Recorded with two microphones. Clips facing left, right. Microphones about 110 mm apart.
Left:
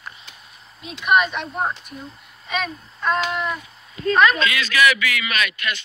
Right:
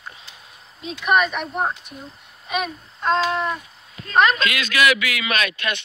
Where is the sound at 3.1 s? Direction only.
30° right (ahead or behind).